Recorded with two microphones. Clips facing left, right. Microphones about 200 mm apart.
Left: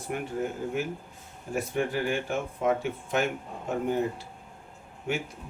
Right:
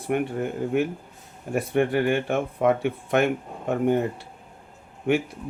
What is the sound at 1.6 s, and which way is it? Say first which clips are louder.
Speech: right 6 dB; 65° right (ahead or behind).